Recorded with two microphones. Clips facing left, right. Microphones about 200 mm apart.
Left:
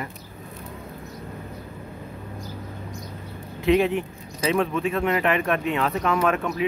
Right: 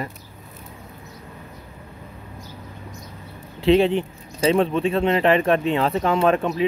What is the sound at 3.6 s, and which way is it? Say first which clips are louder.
Speech: right 3 dB; 30° right (ahead or behind).